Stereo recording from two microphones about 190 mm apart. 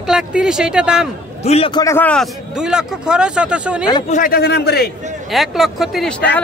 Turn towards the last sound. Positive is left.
turn(degrees=5)  # may be behind; listen again after turning